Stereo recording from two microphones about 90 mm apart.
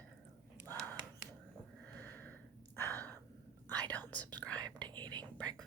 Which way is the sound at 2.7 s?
40° right (ahead or behind).